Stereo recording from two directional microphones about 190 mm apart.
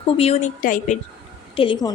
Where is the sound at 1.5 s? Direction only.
25° left (ahead or behind).